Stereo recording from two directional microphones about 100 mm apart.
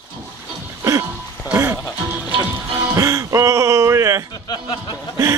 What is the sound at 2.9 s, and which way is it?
Music, 30° right (ahead or behind).